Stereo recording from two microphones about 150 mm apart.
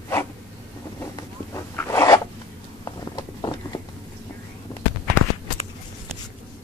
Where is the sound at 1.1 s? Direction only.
20° left (ahead or behind).